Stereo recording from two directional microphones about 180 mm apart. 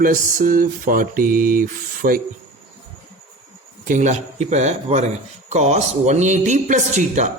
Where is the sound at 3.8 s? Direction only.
45° right (ahead or behind).